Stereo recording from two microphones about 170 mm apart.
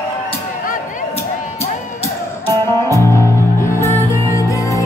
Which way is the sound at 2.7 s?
20° left (ahead or behind).